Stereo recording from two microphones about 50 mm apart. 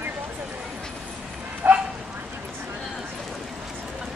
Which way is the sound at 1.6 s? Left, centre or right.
Right.